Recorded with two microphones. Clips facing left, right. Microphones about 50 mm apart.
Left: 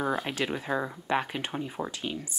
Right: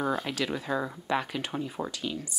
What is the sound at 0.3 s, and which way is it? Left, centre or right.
Speech, left.